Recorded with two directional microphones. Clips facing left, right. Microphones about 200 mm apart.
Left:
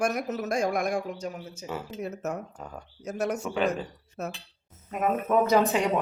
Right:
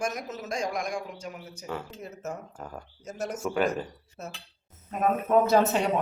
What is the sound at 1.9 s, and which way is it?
Speech, 70° left (ahead or behind).